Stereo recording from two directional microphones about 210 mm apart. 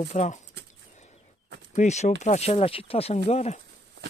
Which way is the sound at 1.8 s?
35° left (ahead or behind).